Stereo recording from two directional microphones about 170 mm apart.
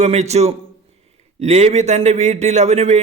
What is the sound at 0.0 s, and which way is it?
A man's voice, 40° right (ahead or behind).